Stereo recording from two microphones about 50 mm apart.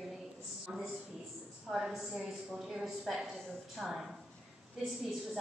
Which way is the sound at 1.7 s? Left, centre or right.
Centre.